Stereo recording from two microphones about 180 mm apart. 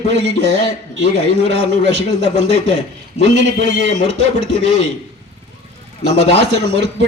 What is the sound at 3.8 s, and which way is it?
Speech, 85° right.